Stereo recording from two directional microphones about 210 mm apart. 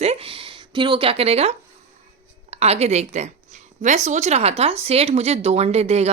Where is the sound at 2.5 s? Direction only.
30° right (ahead or behind).